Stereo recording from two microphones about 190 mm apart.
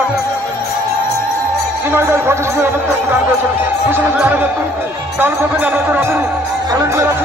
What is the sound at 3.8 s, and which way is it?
Speech, 10° right (ahead or behind).